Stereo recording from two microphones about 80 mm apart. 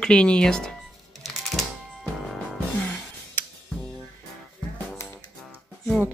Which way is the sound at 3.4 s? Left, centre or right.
Left.